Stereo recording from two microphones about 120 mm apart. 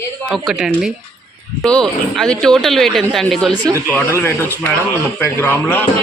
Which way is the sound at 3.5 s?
30° right (ahead or behind).